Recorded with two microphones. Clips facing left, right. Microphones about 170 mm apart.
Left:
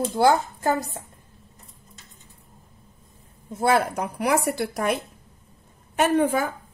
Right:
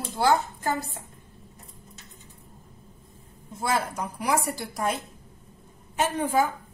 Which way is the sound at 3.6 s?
60° left (ahead or behind).